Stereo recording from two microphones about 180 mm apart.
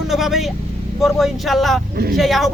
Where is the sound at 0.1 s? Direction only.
Centre (ahead or behind).